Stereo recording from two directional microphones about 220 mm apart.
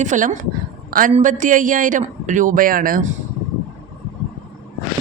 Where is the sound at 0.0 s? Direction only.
35° right (ahead or behind).